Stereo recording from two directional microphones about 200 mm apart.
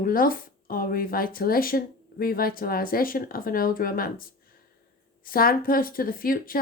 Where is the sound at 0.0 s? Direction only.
45° left (ahead or behind).